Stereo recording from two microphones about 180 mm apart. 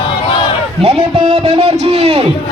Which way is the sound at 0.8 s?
35° right (ahead or behind).